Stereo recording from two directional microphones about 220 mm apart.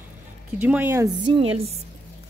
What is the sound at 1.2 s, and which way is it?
Speech, 25° right (ahead or behind).